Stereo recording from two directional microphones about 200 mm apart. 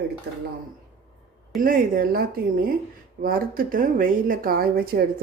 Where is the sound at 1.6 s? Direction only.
45° right (ahead or behind).